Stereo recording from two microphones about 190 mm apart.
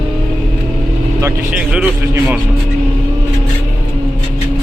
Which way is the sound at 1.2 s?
5° right (ahead or behind).